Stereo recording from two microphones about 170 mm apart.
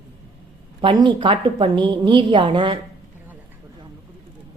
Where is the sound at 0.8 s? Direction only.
30° right (ahead or behind).